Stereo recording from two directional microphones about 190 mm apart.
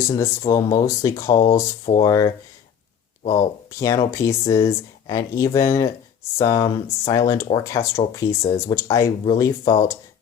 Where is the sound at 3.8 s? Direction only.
15° left (ahead or behind).